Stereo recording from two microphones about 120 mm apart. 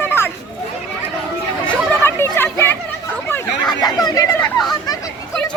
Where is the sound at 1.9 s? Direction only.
20° left (ahead or behind).